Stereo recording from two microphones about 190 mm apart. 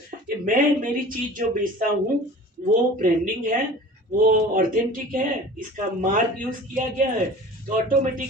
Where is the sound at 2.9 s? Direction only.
45° right (ahead or behind).